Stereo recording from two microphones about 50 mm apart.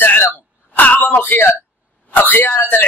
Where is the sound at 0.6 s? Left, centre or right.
Left.